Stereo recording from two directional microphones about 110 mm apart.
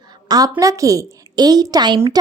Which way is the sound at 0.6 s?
30° right (ahead or behind).